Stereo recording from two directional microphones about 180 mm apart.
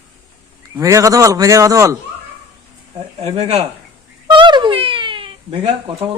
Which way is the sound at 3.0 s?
30° right (ahead or behind).